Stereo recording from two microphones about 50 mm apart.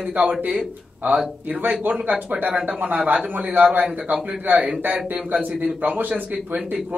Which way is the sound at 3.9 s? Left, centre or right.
Centre.